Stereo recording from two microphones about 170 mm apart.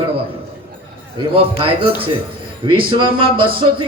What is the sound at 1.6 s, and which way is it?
Speech, 30° right (ahead or behind).